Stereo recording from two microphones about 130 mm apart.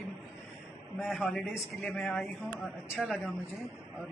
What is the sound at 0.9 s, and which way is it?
Speech, centre (ahead or behind).